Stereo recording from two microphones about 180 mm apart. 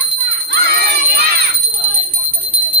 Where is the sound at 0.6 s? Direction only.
65° right (ahead or behind).